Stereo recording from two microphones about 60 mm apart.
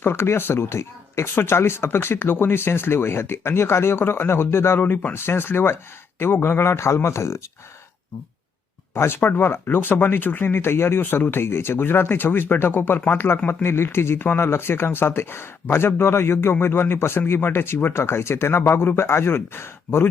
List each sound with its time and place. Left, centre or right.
0.0 s speech: left
9.0 s speech: left